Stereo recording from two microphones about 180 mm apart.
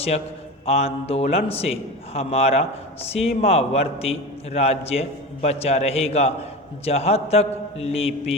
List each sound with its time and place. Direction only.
0.6 s a man's voice: 35° left (ahead or behind)